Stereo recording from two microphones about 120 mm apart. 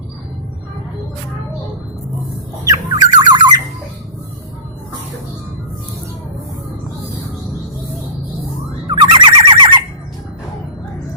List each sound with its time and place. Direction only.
2.6 s squawk: 35° right (ahead or behind)
8.9 s bird: 40° right (ahead or behind)